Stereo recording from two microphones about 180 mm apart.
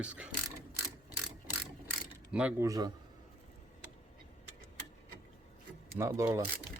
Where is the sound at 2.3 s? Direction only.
5° right (ahead or behind).